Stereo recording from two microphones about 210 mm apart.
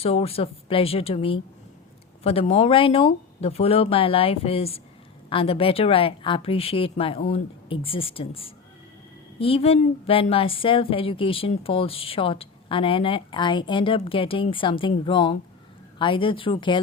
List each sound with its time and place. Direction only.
0.0 s speech: 30° left (ahead or behind)